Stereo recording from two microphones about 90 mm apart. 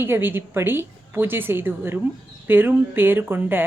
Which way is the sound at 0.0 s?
25° right (ahead or behind).